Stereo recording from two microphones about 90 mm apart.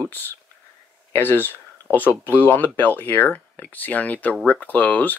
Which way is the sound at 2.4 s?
20° left (ahead or behind).